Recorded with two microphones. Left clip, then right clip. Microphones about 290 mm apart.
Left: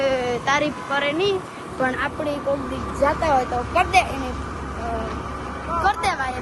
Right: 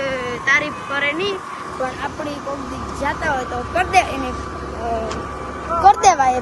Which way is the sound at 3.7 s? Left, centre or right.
Centre.